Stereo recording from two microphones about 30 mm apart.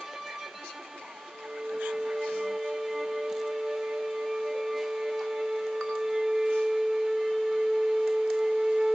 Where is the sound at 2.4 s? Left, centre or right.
Centre.